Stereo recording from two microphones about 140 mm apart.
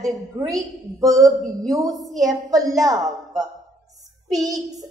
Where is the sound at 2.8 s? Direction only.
25° right (ahead or behind).